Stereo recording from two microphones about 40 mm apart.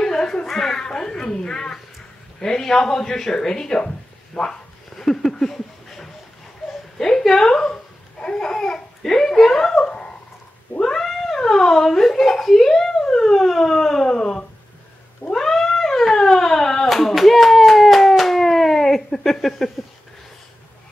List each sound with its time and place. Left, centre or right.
0.0 s a sound: centre
2.4 s speech: centre
4.9 s a sound: centre
7.0 s a woman's voice: centre
8.5 s babbling: centre
10.8 s cat: centre
11.3 s speech: centre
15.3 s cat: centre
19.2 s a sound: centre